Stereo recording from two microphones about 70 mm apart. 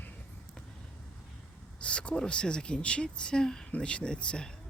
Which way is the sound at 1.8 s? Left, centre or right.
Centre.